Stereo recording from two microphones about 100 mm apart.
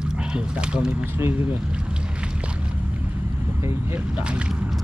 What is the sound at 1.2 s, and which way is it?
Speech, 25° right (ahead or behind).